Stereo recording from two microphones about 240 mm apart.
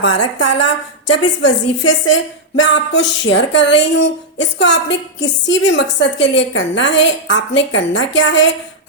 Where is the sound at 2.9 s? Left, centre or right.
Left.